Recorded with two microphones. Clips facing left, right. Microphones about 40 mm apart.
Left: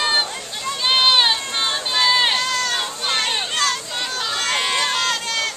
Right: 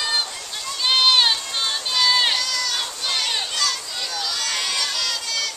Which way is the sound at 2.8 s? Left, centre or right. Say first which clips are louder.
Left 3 dB; left.